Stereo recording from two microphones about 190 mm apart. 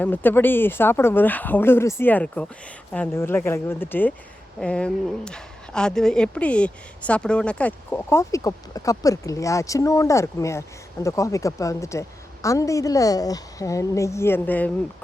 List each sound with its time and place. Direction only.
0.0 s speech: 10° left (ahead or behind)